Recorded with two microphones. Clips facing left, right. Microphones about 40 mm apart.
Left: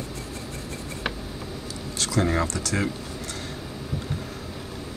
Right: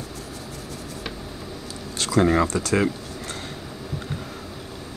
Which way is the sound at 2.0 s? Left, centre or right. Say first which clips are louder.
Right 5 dB; right.